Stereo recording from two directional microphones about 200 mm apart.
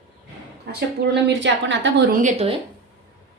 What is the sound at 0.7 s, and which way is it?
Speech, 60° right (ahead or behind).